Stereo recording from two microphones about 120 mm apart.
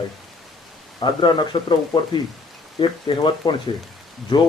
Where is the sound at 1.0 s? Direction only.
40° left (ahead or behind).